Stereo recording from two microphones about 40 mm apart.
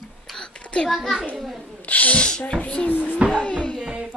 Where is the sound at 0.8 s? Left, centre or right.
Centre.